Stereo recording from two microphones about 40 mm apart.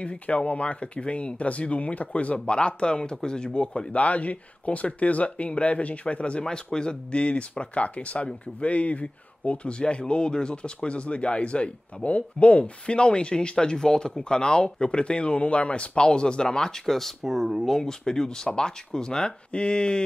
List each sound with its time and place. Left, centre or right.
0.0 s speech: left
6.4 s speech: centre
16.8 s speech: centre; by 20.0 s left